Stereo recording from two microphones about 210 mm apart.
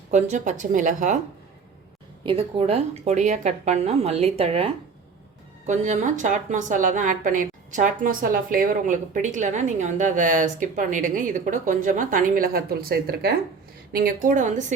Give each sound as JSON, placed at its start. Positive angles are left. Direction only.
{"t": 0.1, "sound": "a woman's voice", "side_deg": -35}
{"t": 2.2, "sound": "a woman's voice", "side_deg": -25}